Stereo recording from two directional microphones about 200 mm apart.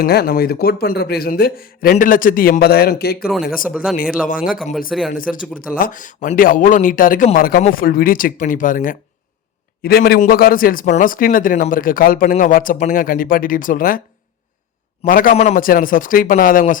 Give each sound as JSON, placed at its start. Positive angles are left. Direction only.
{"t": 0.0, "sound": "speech", "side_deg": 50}
{"t": 3.7, "sound": "speech", "side_deg": 0}
{"t": 4.3, "sound": "speech", "side_deg": 45}
{"t": 4.9, "sound": "speech", "side_deg": 0}
{"t": 5.1, "sound": "speech", "side_deg": 45}
{"t": 15.0, "sound": "speech", "side_deg": 45}